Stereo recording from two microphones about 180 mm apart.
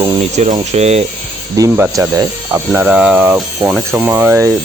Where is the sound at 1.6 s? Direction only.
15° right (ahead or behind).